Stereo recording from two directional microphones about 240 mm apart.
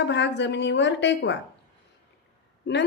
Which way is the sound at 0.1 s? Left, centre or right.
Left.